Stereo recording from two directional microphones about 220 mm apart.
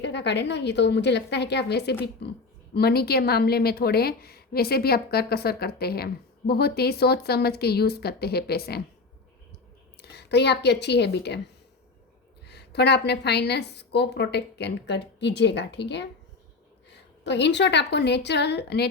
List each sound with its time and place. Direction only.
0.0 s a woman's voice: 50° left (ahead or behind)
10.0 s a woman's voice: 50° left (ahead or behind)
12.5 s a woman's voice: 50° left (ahead or behind)